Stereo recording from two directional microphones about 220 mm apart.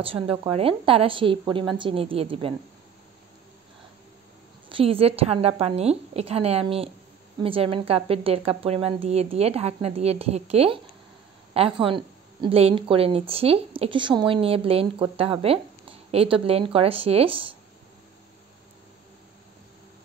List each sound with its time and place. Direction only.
0.0 s a woman's voice: 25° right (ahead or behind)
4.6 s a woman's voice: 25° right (ahead or behind)